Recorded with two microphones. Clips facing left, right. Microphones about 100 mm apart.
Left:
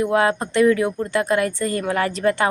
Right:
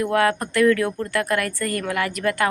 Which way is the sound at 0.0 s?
20° left (ahead or behind).